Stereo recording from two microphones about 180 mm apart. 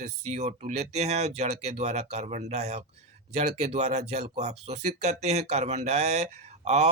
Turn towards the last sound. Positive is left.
turn(degrees=-40)  # may be behind; listen again after turning